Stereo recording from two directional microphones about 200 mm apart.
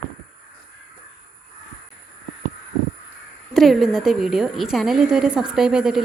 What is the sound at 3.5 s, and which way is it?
A woman's voice, centre (ahead or behind).